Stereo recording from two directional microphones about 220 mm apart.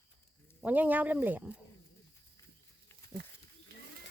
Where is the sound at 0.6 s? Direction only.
10° right (ahead or behind).